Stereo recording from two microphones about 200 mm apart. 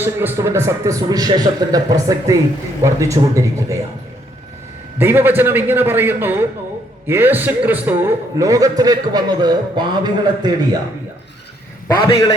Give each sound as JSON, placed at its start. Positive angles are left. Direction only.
{"t": 0.0, "sound": "a man's voice", "side_deg": -10}
{"t": 4.9, "sound": "a man's voice", "side_deg": -10}